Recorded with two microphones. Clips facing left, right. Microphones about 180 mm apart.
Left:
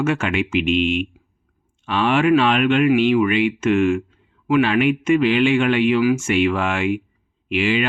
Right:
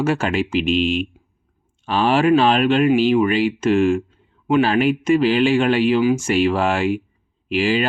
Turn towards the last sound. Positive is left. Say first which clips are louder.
# right 1 dB
turn(degrees=-35)  # may be behind; listen again after turning